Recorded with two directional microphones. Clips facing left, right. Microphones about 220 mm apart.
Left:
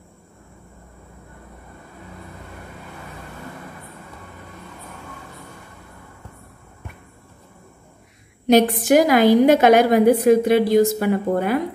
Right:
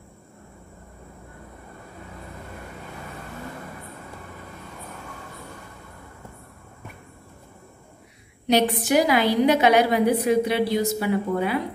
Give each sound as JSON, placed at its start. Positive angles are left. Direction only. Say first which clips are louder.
{"t": 8.5, "sound": "a woman's voice", "louder": "left 6 dB", "side_deg": 50}